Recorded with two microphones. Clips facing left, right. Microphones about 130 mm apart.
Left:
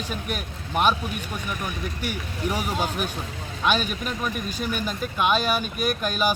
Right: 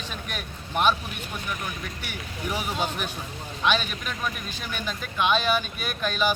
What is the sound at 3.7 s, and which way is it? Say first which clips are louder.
Speech: left 2 dB; 45° left (ahead or behind).